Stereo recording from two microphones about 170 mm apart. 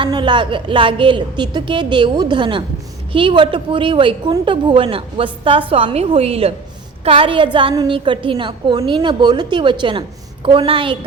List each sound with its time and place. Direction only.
0.0 s a woman's voice: 25° right (ahead or behind)